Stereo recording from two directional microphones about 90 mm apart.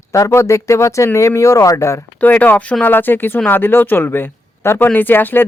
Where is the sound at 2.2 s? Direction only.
20° left (ahead or behind).